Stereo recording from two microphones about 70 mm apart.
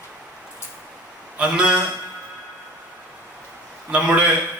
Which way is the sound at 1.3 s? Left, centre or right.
Centre.